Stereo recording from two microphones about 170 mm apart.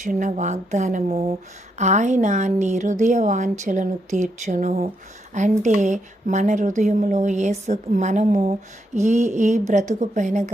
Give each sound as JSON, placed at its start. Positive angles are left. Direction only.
{"t": 0.0, "sound": "speech", "side_deg": -45}